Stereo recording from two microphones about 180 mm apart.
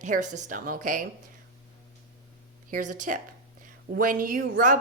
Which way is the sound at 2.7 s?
45° right (ahead or behind).